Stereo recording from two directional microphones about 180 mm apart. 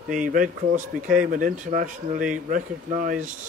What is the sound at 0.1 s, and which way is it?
Speech, 45° right (ahead or behind).